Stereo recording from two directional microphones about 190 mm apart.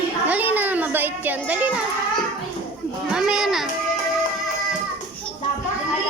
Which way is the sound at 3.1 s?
5° right (ahead or behind).